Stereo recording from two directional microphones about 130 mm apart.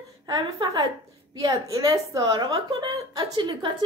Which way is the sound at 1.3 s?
25° right (ahead or behind).